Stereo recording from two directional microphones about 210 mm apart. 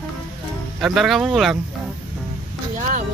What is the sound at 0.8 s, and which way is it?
Speech, centre (ahead or behind).